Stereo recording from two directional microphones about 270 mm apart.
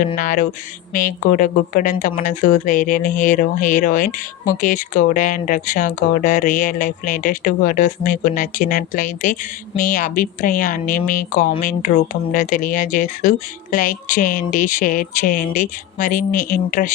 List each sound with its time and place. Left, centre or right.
0.2 s a woman's voice: left